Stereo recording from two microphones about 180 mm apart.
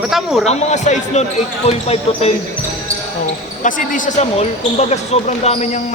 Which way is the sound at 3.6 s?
45° left (ahead or behind).